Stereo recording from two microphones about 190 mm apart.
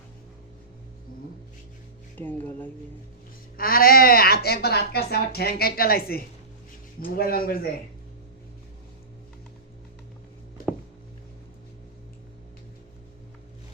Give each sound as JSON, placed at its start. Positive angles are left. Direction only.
{"t": 2.1, "sound": "speech", "side_deg": 10}
{"t": 3.6, "sound": "speech", "side_deg": 50}